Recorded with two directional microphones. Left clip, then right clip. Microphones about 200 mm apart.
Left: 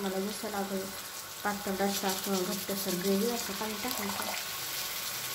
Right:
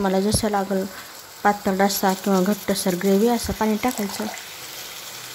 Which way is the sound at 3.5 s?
65° right (ahead or behind).